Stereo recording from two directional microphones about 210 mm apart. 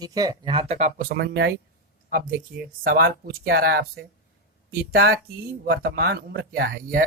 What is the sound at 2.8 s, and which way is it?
Speech, 45° right (ahead or behind).